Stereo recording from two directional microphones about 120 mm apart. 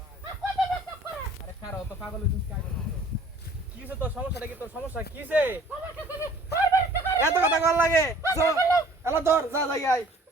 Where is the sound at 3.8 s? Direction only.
10° right (ahead or behind).